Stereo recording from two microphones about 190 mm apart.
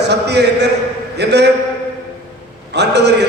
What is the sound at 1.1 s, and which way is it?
Speech, 60° right (ahead or behind).